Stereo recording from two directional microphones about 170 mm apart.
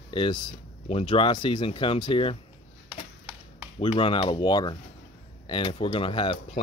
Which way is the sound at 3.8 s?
30° left (ahead or behind).